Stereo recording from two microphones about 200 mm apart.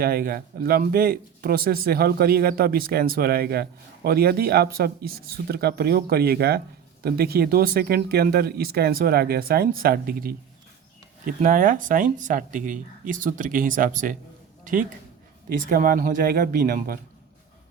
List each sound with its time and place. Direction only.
0.0 s a man's voice: 45° right (ahead or behind)
11.3 s a man's voice: 45° right (ahead or behind)